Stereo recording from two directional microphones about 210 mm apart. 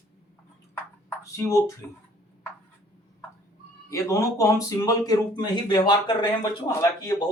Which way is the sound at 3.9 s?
15° left (ahead or behind).